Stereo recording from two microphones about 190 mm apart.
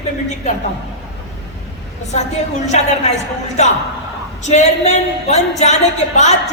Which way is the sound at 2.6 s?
35° left (ahead or behind).